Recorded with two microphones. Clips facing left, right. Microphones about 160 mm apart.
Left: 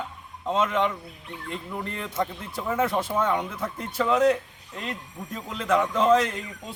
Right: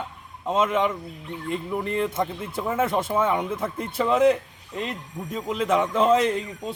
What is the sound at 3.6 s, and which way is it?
Speech, 20° right (ahead or behind).